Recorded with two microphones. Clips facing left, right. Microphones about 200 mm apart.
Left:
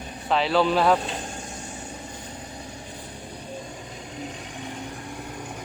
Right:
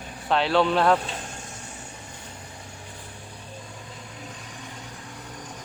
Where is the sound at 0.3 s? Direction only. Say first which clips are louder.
Even; centre (ahead or behind).